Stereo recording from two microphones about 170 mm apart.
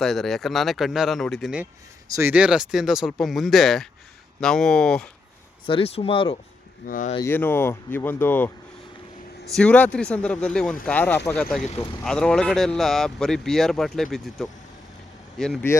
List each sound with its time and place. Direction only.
0.0 s speech: centre (ahead or behind)
5.6 s speech: 35° left (ahead or behind)
6.8 s speech: 50° left (ahead or behind)
7.2 s speech: 15° left (ahead or behind)
9.6 s speech: 10° left (ahead or behind)